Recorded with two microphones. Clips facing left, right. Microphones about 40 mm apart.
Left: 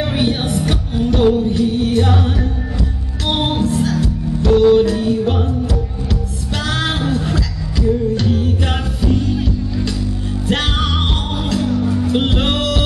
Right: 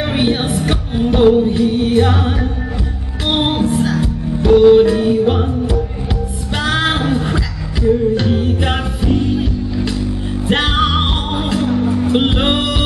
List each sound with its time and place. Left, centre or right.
0.0 s music: centre